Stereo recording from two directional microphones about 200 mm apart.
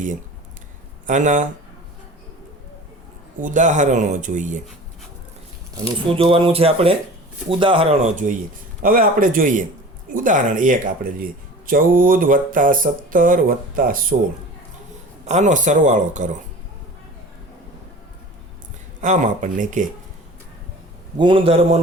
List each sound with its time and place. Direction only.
1.0 s speech: 40° right (ahead or behind)
3.4 s speech: 40° right (ahead or behind)
5.7 s speech: 25° right (ahead or behind); by 14.2 s 45° right (ahead or behind)
15.3 s speech: 35° right (ahead or behind)
19.0 s speech: 40° right (ahead or behind)
21.2 s speech: 25° right (ahead or behind)